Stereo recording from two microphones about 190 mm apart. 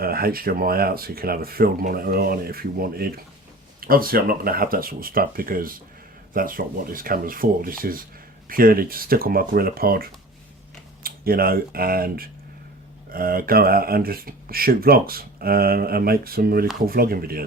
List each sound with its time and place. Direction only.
0.0 s speech: 50° right (ahead or behind)